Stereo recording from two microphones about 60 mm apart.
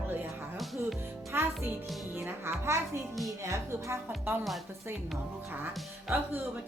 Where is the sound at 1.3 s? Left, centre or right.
Right.